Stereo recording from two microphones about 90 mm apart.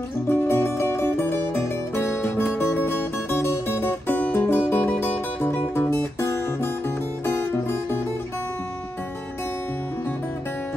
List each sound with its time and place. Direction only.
0.3 s music: 25° left (ahead or behind)